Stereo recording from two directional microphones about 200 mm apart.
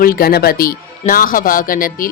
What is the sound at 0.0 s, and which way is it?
Speech, 45° left (ahead or behind).